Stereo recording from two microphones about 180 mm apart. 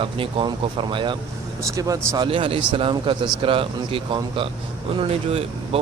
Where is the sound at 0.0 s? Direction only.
30° right (ahead or behind).